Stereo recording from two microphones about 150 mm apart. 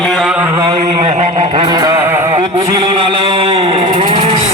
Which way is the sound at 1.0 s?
50° right (ahead or behind).